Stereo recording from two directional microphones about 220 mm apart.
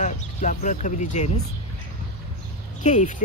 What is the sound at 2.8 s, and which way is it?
Speech, 35° left (ahead or behind).